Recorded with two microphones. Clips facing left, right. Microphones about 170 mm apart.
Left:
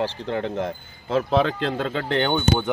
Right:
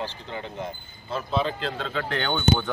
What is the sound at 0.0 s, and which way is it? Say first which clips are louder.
Speech: left 8 dB; 70° left (ahead or behind).